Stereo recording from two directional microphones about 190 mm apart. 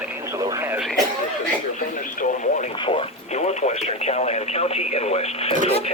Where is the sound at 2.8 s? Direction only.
30° left (ahead or behind).